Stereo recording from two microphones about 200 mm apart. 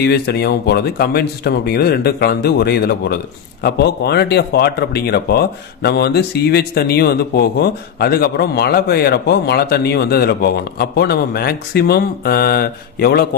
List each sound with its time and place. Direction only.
0.0 s speech: 55° left (ahead or behind)